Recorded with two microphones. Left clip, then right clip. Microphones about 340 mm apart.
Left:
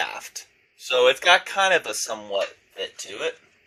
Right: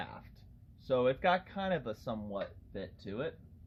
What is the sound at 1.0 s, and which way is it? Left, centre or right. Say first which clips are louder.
Speech: left 14 dB; left.